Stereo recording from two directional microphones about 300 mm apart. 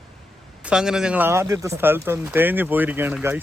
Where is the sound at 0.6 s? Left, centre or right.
Centre.